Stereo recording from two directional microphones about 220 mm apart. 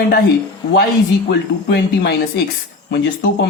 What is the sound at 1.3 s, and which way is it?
Speech, 50° left (ahead or behind).